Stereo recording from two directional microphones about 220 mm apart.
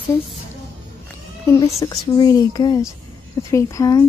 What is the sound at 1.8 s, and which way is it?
Speech, 15° left (ahead or behind).